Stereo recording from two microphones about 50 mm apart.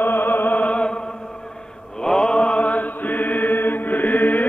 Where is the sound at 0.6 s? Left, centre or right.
Left.